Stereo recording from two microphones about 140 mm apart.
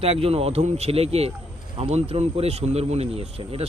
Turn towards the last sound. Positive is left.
turn(degrees=-45)  # may be behind; listen again after turning